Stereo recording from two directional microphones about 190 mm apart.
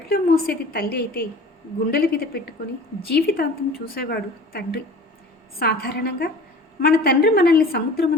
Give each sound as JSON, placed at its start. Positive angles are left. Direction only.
{"t": 0.1, "sound": "a woman's voice", "side_deg": 55}